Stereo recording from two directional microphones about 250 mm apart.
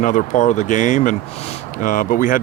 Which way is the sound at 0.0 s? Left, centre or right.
Left.